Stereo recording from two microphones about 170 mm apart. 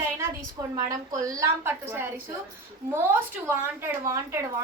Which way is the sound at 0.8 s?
20° right (ahead or behind).